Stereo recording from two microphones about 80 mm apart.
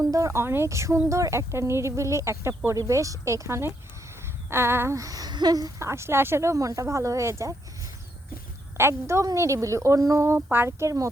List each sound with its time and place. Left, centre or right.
0.0 s speech: right
4.9 s a sound: right
5.8 s speech: right
8.8 s speech: right
10.2 s speech: right
10.7 s speech: right